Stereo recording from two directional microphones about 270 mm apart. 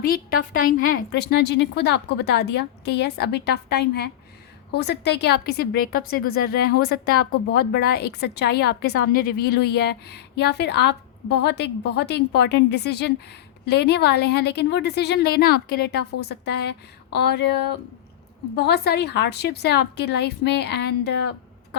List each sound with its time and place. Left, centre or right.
0.0 s a woman's voice: left